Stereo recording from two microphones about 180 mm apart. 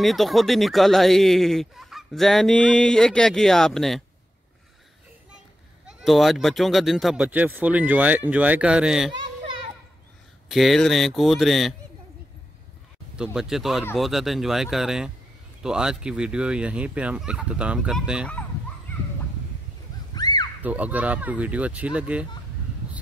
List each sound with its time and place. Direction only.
0.0 s speech: centre (ahead or behind)
6.0 s speech: centre (ahead or behind)
10.5 s speech: centre (ahead or behind)
13.1 s speech: 5° right (ahead or behind)
20.2 s a sound: 25° left (ahead or behind)
20.6 s speech: 10° right (ahead or behind)